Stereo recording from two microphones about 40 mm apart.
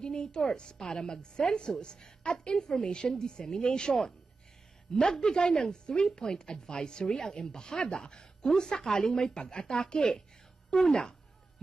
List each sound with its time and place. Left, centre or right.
0.0 s a woman's voice: left